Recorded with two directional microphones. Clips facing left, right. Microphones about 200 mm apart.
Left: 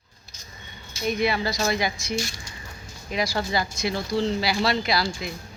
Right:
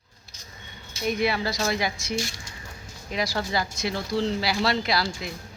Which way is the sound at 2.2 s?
25° right (ahead or behind).